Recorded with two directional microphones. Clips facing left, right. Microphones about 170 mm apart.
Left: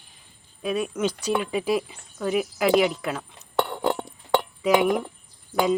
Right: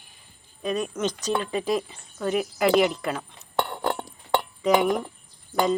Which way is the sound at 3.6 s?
10° left (ahead or behind).